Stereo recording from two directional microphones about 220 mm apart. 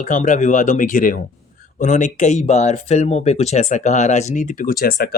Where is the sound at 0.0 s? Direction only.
35° left (ahead or behind).